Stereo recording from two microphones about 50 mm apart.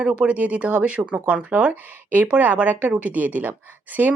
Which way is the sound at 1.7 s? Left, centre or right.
Right.